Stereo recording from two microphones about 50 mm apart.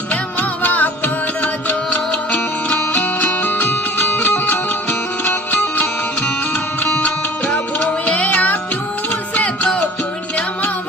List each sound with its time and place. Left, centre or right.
0.1 s music: left
7.5 s music: left